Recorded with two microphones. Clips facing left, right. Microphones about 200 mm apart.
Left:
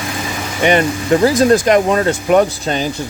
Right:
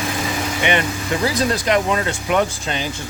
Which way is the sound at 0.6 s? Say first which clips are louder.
Left 9 dB; 40° left (ahead or behind).